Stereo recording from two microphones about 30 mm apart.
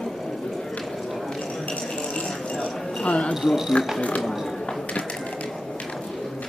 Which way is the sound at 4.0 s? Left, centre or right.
Left.